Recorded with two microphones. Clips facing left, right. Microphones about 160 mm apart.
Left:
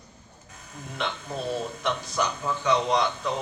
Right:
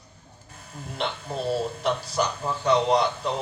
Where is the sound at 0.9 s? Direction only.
35° right (ahead or behind).